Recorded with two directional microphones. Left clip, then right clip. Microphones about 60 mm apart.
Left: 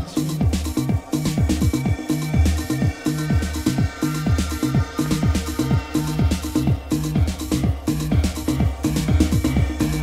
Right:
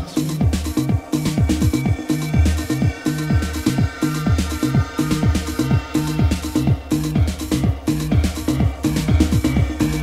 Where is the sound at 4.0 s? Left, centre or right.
Left.